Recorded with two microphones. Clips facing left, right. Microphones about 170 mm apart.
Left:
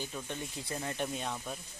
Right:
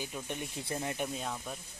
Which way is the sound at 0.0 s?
15° right (ahead or behind).